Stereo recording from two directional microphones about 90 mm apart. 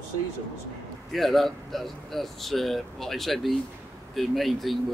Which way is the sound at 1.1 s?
Centre (ahead or behind).